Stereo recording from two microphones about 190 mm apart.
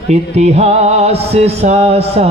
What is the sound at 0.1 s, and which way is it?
A man's voice, 35° right (ahead or behind).